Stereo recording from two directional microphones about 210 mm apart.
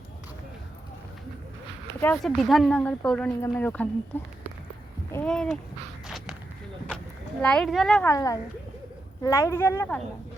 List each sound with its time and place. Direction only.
2.0 s speech: 5° left (ahead or behind)
5.1 s speech: 5° left (ahead or behind)
6.1 s walk: centre (ahead or behind)
7.4 s speech: 5° left (ahead or behind)
8.1 s speech: 15° left (ahead or behind)